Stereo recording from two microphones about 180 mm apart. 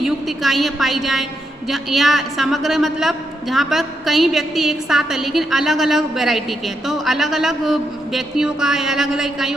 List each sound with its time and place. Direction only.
0.0 s a woman's voice: centre (ahead or behind)